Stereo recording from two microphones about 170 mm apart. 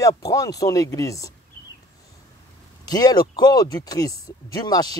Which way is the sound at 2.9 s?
20° left (ahead or behind).